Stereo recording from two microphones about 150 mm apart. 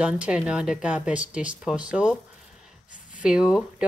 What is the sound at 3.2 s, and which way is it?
Speech, 5° right (ahead or behind).